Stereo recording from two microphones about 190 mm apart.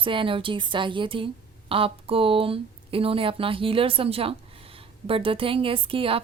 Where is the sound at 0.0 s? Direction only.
25° right (ahead or behind).